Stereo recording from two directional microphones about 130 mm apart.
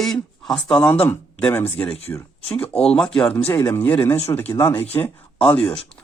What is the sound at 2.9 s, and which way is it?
Speech, 5° left (ahead or behind).